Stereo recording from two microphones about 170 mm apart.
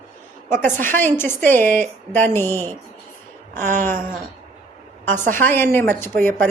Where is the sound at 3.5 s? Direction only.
45° right (ahead or behind).